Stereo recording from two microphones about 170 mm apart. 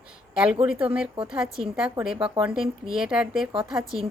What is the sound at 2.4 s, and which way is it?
A woman's voice, 5° right (ahead or behind).